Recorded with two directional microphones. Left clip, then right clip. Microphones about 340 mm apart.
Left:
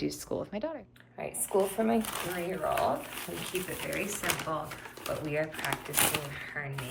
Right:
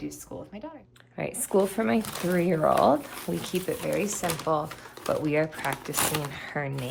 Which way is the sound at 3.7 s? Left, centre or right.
Centre.